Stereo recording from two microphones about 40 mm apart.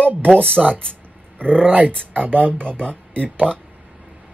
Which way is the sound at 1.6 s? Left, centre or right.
Right.